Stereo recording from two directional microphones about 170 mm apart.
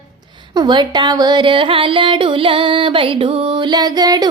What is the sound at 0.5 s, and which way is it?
Music, 25° right (ahead or behind).